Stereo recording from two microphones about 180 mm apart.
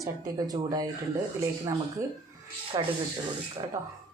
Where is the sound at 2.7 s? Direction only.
25° right (ahead or behind).